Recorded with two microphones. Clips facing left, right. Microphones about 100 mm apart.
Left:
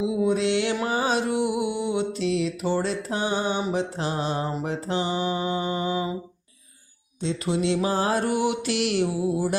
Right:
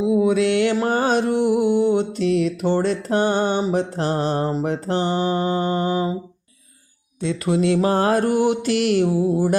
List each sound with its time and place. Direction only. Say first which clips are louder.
0.3 s music: right 5 dB; 60° right (ahead or behind)
3.7 s mantra: right 5 dB; 50° right (ahead or behind)
7.2 s mantra: right 5 dB; 60° right (ahead or behind); by 9.6 s 45° right (ahead or behind)